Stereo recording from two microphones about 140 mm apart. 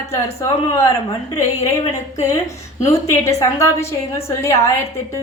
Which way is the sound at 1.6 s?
55° left (ahead or behind).